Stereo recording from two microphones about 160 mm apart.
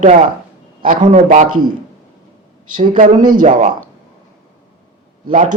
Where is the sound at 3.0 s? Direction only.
50° right (ahead or behind).